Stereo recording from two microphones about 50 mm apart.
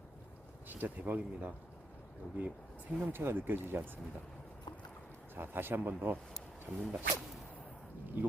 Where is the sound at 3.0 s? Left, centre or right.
Right.